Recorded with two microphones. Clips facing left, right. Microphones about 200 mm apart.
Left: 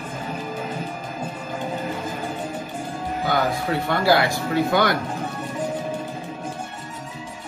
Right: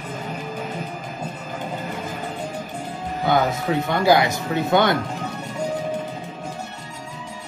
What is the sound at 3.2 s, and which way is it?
Speech, 20° right (ahead or behind).